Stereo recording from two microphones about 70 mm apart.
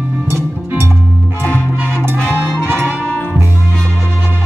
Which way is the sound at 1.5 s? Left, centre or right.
Centre.